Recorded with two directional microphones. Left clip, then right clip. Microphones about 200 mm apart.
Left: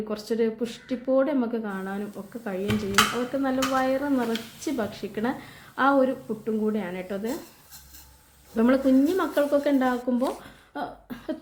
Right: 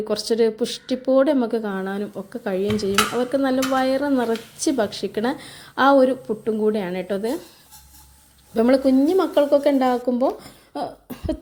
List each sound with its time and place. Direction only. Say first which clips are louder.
0.1 s speech: right 7 dB; 40° right (ahead or behind)
8.5 s speech: right 4 dB; 25° right (ahead or behind)
10.8 s cough: right 5 dB; 25° right (ahead or behind)